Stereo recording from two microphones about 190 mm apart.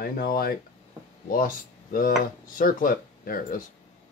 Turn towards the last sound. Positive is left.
turn(degrees=50)  # may be behind; listen again after turning